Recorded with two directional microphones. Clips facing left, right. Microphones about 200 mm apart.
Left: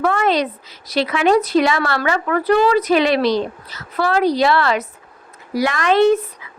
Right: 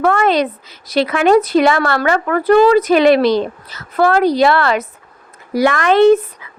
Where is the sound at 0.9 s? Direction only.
50° right (ahead or behind).